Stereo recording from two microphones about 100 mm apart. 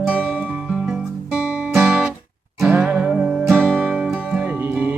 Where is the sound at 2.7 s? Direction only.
15° right (ahead or behind).